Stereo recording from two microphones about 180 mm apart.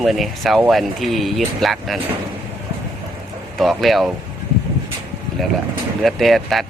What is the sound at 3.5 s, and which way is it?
Speech, centre (ahead or behind).